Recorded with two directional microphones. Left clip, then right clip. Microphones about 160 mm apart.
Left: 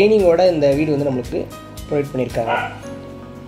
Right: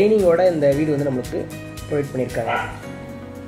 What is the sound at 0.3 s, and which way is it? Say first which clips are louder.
Speech: left 2 dB; 30° left (ahead or behind).